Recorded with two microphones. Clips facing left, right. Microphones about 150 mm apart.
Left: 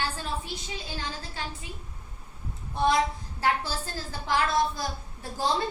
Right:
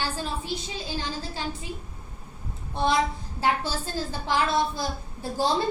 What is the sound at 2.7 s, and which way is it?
A woman's voice, 30° right (ahead or behind).